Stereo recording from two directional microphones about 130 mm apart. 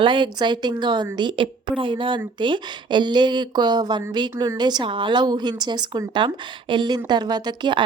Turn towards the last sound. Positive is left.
turn(degrees=-35)  # may be behind; listen again after turning